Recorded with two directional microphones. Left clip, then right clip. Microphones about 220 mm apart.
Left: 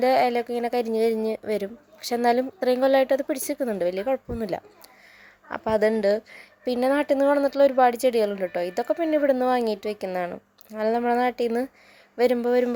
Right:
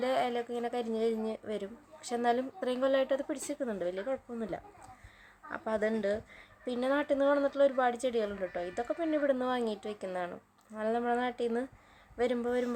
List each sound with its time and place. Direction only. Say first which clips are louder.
0.0 s speech: left 11 dB; 25° left (ahead or behind)